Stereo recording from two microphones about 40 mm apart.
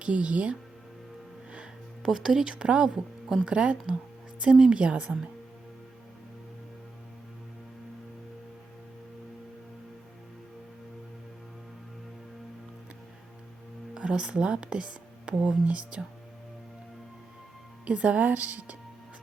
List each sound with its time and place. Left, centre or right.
0.0 s a woman's voice: right
2.0 s speech: centre
2.5 s a woman's voice: right
13.9 s speech: right
17.8 s a woman's voice: right